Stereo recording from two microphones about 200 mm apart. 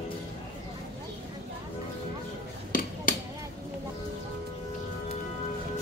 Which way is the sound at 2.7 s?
45° left (ahead or behind).